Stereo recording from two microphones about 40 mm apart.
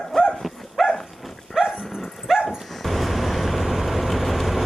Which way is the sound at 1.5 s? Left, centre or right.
Centre.